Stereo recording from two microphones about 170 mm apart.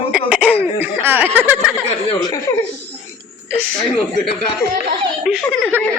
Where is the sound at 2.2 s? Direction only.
20° left (ahead or behind).